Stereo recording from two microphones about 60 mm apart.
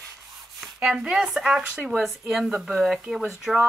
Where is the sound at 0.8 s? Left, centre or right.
Centre.